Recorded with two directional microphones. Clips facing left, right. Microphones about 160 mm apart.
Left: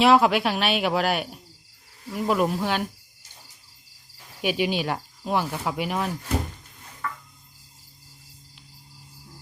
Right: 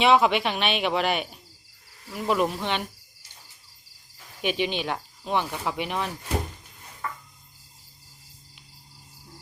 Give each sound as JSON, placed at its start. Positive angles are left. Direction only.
{"t": 0.0, "sound": "speech", "side_deg": 0}
{"t": 4.4, "sound": "speech", "side_deg": 5}
{"t": 7.0, "sound": "a sound", "side_deg": -20}